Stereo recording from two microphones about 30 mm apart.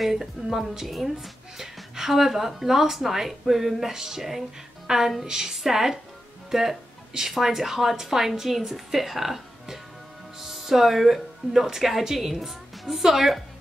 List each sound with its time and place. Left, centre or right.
0.1 s speech: centre
0.8 s a woman's voice: centre